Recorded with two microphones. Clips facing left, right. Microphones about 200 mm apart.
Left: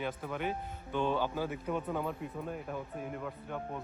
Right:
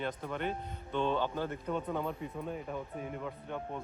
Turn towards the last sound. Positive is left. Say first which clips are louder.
# even
turn(degrees=0)  # may be behind; listen again after turning